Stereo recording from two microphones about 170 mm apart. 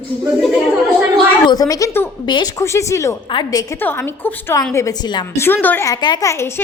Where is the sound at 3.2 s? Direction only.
25° left (ahead or behind).